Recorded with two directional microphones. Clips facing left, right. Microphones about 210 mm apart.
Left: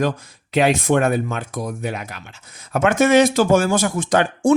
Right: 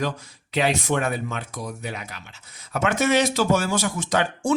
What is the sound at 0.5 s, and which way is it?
Speech, 50° left (ahead or behind).